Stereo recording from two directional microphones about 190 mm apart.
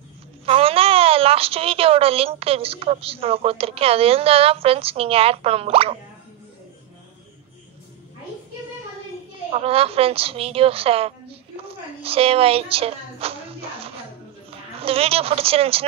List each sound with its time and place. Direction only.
0.5 s a woman's voice: 30° right (ahead or behind)
9.5 s a woman's voice: 30° right (ahead or behind)